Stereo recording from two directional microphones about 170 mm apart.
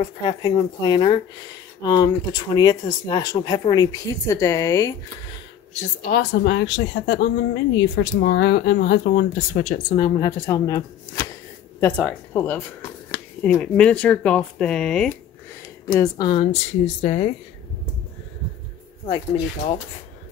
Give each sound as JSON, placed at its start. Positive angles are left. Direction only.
{"t": 0.0, "sound": "speech", "side_deg": 25}
{"t": 6.0, "sound": "speech", "side_deg": 75}
{"t": 9.6, "sound": "a woman's voice", "side_deg": 45}
{"t": 9.9, "sound": "speech", "side_deg": 25}
{"t": 11.8, "sound": "speech", "side_deg": 10}
{"t": 15.9, "sound": "speech", "side_deg": 15}
{"t": 16.8, "sound": "a woman's voice", "side_deg": 45}
{"t": 19.0, "sound": "speech", "side_deg": 30}